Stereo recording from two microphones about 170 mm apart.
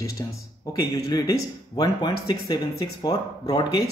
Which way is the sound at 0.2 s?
20° left (ahead or behind).